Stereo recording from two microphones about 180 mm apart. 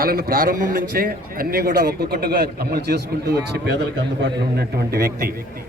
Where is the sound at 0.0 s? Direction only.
55° right (ahead or behind).